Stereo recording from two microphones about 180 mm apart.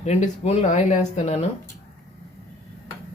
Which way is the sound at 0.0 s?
40° left (ahead or behind).